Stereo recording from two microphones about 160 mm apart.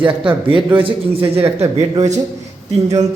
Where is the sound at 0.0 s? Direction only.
30° right (ahead or behind).